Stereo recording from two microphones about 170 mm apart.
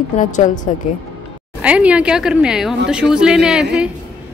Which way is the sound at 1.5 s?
5° right (ahead or behind).